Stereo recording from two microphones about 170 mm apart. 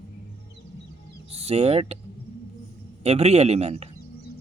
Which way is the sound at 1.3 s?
35° right (ahead or behind).